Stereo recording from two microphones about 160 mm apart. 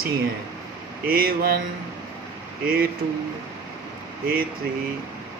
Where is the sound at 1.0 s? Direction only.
65° right (ahead or behind).